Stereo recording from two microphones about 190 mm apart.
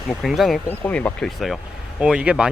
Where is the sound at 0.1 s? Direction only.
Centre (ahead or behind).